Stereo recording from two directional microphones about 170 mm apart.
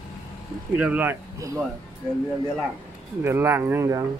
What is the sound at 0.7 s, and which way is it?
Speech, 10° right (ahead or behind).